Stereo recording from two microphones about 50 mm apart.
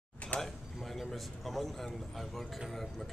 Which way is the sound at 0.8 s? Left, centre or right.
Centre.